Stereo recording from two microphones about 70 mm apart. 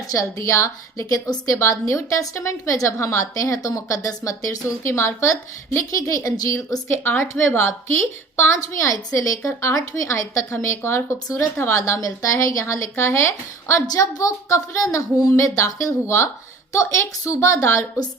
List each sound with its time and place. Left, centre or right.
0.1 s a woman's voice: left
6.8 s a woman's voice: left
8.5 s a woman's voice: left
13.8 s a woman's voice: left